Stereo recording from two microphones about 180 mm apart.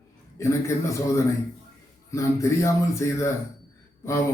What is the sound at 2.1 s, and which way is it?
A man's voice, 15° left (ahead or behind).